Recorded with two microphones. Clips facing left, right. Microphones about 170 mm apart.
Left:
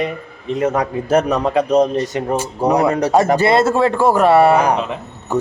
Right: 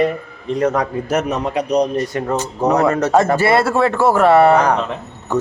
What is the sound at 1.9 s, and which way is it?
Speech, 20° left (ahead or behind).